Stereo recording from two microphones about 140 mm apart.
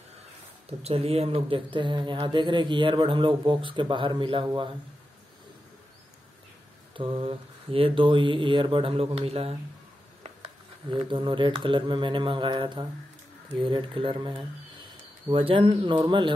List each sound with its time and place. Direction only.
0.7 s speech: 45° right (ahead or behind)
6.9 s speech: 40° right (ahead or behind)